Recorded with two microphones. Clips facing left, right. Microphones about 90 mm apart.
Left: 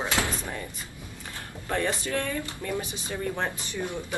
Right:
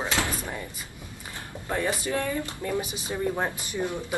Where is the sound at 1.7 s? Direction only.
10° right (ahead or behind).